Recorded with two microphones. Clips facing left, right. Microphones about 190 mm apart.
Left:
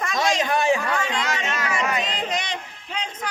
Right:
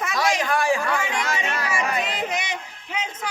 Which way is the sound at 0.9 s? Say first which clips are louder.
Even; 10° right (ahead or behind).